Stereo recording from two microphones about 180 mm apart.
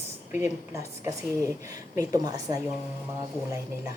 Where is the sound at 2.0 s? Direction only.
20° right (ahead or behind).